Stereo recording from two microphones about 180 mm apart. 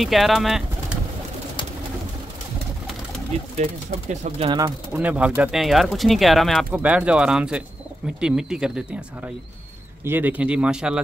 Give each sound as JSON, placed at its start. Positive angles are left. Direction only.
{"t": 0.0, "sound": "speech", "side_deg": 0}
{"t": 4.1, "sound": "speech", "side_deg": -40}
{"t": 4.5, "sound": "speech", "side_deg": -25}
{"t": 4.9, "sound": "speech", "side_deg": -5}